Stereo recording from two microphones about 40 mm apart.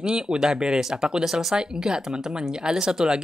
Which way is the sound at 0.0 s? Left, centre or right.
Centre.